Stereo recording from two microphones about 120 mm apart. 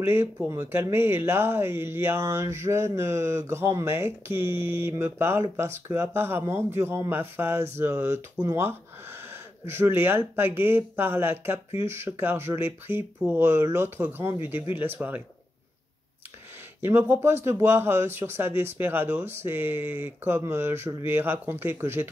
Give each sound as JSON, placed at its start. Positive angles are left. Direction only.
{"t": 0.0, "sound": "speech", "side_deg": -20}
{"t": 9.7, "sound": "speech", "side_deg": -20}
{"t": 16.8, "sound": "speech", "side_deg": -20}